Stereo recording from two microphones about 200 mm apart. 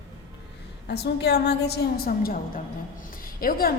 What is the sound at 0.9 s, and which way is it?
A woman's voice, 55° left (ahead or behind).